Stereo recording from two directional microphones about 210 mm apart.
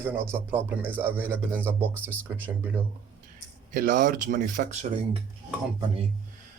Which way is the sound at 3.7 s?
40° right (ahead or behind).